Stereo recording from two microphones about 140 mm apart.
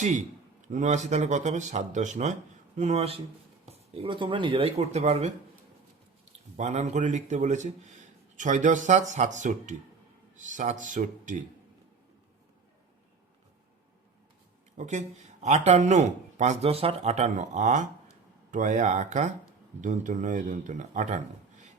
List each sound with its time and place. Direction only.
0.7 s speech: 60° right (ahead or behind)
6.6 s speech: 55° right (ahead or behind)
14.8 s speech: 55° right (ahead or behind)